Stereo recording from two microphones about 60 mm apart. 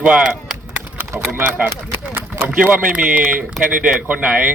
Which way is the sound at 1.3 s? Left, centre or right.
Right.